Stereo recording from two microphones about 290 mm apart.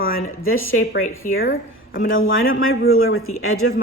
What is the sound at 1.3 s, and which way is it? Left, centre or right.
Speech, left.